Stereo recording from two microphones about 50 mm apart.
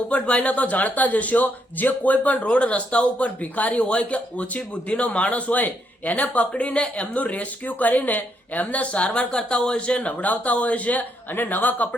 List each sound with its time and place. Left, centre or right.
0.1 s a man's voice: left